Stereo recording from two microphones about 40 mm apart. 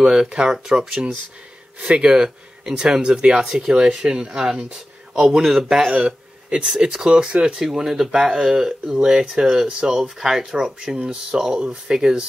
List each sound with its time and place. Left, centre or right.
0.0 s speech: centre
5.9 s a sound: right
6.8 s speech: right
7.6 s speech: centre
9.9 s speech: centre